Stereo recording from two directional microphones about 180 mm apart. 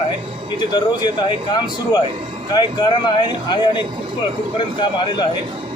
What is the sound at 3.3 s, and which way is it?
Speech, 25° left (ahead or behind).